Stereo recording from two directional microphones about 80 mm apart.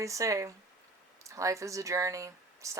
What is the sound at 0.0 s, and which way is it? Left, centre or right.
Speech, right.